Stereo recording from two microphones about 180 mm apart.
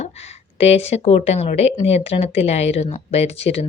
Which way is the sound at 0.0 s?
35° left (ahead or behind).